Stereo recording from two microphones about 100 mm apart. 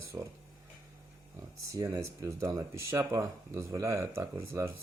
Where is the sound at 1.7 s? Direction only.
30° right (ahead or behind).